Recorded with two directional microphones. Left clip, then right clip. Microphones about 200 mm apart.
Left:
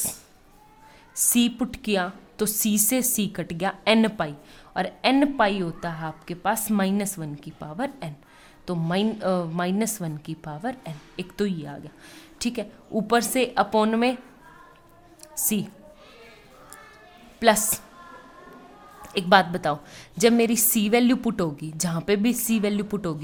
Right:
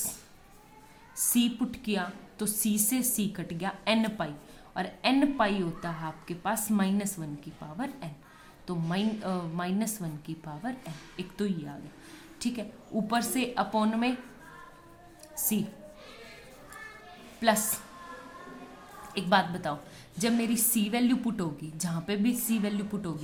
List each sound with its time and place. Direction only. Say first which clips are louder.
1.1 s a woman's voice: left 6 dB; 45° left (ahead or behind)
15.4 s a woman's voice: left 5 dB; 45° left (ahead or behind)
17.4 s a woman's voice: left 7 dB; 45° left (ahead or behind)
19.1 s a woman's voice: left 8 dB; 45° left (ahead or behind)